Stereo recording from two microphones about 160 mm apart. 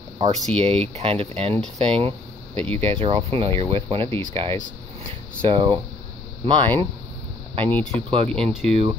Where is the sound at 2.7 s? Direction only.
35° right (ahead or behind).